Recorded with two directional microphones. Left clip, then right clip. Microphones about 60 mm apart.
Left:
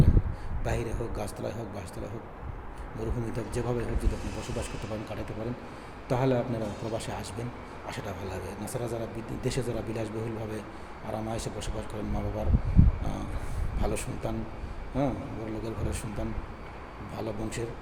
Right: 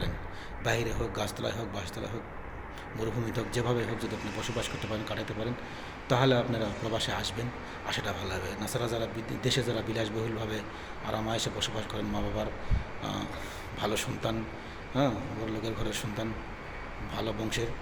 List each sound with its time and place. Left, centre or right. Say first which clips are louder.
0.6 s speech: right 3 dB; left
3.2 s speech: right 2 dB; left
6.1 s a man's voice: right 1 dB; left
13.7 s a man's voice: right 2 dB; left